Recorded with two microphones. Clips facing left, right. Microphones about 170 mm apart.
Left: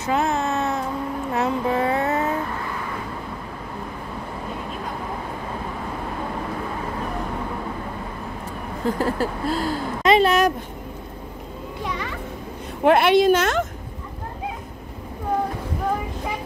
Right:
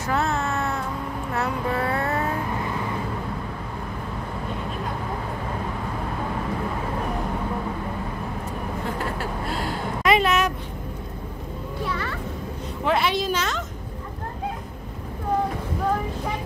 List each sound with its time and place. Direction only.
0.0 s a sound: 15° left (ahead or behind)
1.3 s child singing: 20° left (ahead or behind)
9.2 s speech: 35° left (ahead or behind)
11.8 s children playing: 15° left (ahead or behind)
12.8 s speech: 60° left (ahead or behind)